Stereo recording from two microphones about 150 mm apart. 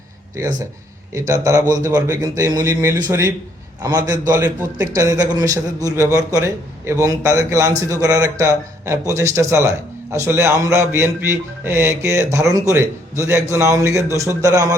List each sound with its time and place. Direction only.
1.3 s a man's voice: 20° right (ahead or behind)